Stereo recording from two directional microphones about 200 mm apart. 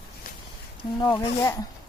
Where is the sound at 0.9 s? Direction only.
20° left (ahead or behind).